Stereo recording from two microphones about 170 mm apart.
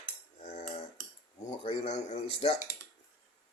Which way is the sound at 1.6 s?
35° left (ahead or behind).